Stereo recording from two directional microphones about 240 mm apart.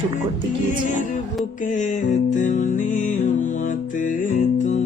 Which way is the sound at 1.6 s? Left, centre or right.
Left.